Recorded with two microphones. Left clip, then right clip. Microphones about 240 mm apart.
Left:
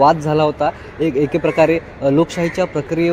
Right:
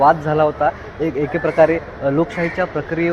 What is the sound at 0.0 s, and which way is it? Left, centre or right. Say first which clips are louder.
Speech: left 1 dB; left.